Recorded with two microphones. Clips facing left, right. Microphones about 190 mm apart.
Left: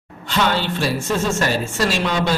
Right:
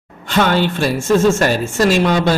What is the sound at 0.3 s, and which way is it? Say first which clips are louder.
Speech: right 5 dB; 50° right (ahead or behind).